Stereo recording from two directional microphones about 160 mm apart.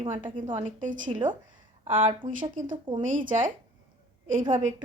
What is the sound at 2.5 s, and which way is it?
Speech, 55° right (ahead or behind).